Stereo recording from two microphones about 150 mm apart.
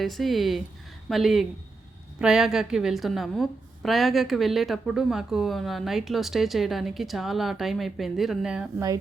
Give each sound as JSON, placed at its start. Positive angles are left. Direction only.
{"t": 0.0, "sound": "a woman's voice", "side_deg": 0}